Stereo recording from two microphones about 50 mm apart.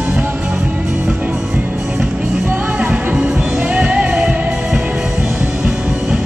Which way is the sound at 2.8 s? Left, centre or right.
Right.